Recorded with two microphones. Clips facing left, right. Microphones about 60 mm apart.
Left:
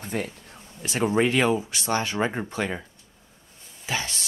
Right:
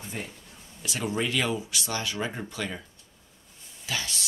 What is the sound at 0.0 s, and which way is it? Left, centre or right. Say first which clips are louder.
Speech: left 7 dB; left.